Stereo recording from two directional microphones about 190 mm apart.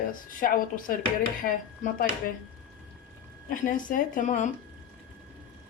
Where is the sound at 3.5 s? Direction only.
45° left (ahead or behind).